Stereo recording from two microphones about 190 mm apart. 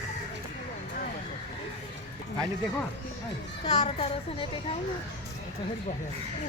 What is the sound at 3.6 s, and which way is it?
A woman's voice, 30° left (ahead or behind).